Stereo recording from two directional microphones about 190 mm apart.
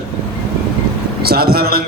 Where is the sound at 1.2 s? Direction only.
55° right (ahead or behind).